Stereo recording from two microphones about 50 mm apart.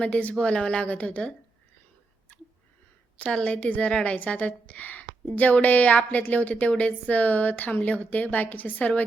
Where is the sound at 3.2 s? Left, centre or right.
Left.